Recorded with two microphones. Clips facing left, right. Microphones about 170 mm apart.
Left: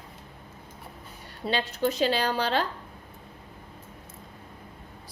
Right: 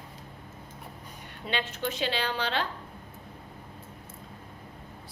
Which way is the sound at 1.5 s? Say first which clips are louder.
Left 5 dB; 40° left (ahead or behind).